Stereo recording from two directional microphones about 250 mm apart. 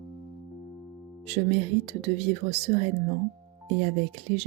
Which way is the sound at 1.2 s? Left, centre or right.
Right.